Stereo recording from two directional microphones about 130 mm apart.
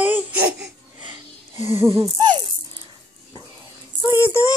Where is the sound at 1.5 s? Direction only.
20° right (ahead or behind).